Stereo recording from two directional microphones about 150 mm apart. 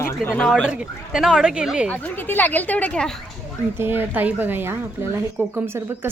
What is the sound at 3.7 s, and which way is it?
Speech, 15° right (ahead or behind).